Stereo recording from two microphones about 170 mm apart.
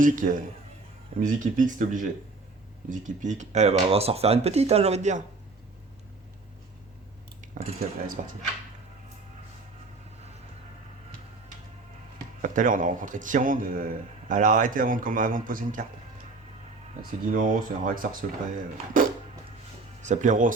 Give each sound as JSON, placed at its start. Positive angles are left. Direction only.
{"t": 0.0, "sound": "a man's voice", "side_deg": -50}
{"t": 7.4, "sound": "a man's voice", "side_deg": -50}
{"t": 12.4, "sound": "a man's voice", "side_deg": -50}
{"t": 17.3, "sound": "a man's voice", "side_deg": -50}
{"t": 20.0, "sound": "a man's voice", "side_deg": -45}